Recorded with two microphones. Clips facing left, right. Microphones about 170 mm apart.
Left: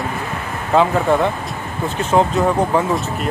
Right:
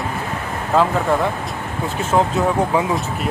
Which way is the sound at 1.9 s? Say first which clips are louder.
Left 2 dB; 5° right (ahead or behind).